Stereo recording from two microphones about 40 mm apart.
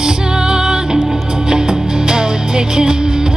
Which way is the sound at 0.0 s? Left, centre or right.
Centre.